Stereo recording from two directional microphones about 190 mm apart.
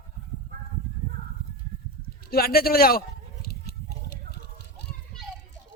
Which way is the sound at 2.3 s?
55° left (ahead or behind).